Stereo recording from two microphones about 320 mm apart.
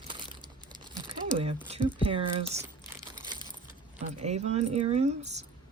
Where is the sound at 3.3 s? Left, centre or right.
Centre.